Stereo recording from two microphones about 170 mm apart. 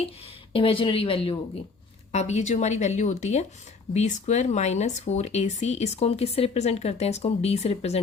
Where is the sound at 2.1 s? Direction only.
40° left (ahead or behind).